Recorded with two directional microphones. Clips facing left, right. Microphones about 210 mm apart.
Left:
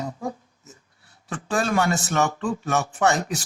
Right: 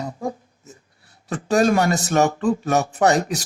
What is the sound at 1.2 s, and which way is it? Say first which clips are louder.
Speech: right 7 dB; 40° right (ahead or behind).